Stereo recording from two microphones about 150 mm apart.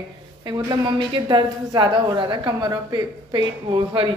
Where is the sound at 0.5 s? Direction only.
30° right (ahead or behind).